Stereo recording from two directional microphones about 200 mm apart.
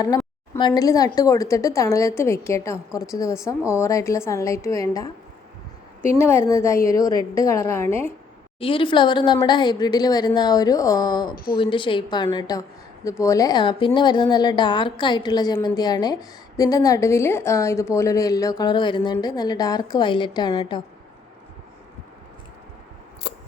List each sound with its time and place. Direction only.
0.5 s a woman's voice: 20° left (ahead or behind)
6.1 s a woman's voice: 10° left (ahead or behind)
8.5 s a woman's voice: 25° left (ahead or behind)
23.2 s scissors: 60° left (ahead or behind)